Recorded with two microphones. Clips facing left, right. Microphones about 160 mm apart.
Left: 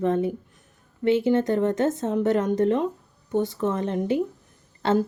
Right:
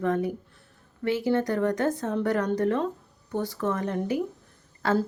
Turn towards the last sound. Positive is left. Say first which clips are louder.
# left 3 dB
turn(degrees=25)  # may be behind; listen again after turning